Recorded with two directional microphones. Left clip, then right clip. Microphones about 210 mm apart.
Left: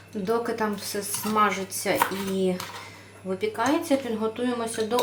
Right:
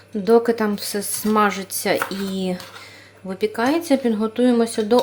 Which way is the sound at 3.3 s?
45° right (ahead or behind).